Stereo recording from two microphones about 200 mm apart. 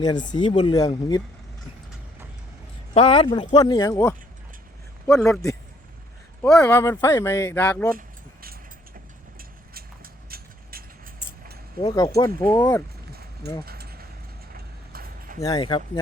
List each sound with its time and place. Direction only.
0.0 s speech: 20° left (ahead or behind)
2.9 s speech: 25° left (ahead or behind); by 7.9 s 10° left (ahead or behind)
7.9 s keys jangling: 45° right (ahead or behind)
9.4 s vehicle: 50° right (ahead or behind)
11.8 s speech: 25° left (ahead or behind)
13.7 s a sound: 50° right (ahead or behind)
15.4 s speech: 20° left (ahead or behind)